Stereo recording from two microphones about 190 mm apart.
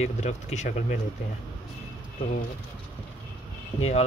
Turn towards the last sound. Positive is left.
turn(degrees=35)  # may be behind; listen again after turning